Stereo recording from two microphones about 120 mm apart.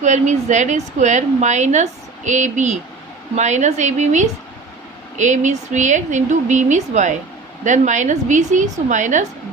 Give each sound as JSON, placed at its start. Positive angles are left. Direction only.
{"t": 0.0, "sound": "a woman's voice", "side_deg": -80}
{"t": 3.3, "sound": "a woman's voice", "side_deg": -80}
{"t": 5.1, "sound": "speech", "side_deg": -90}